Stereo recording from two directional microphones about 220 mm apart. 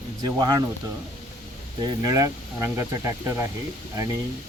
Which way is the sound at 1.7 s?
20° right (ahead or behind).